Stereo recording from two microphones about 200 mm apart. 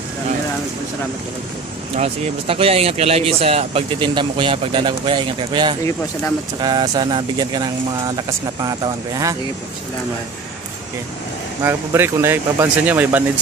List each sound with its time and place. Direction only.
2.0 s speech: 30° right (ahead or behind)
11.6 s speech: 10° right (ahead or behind)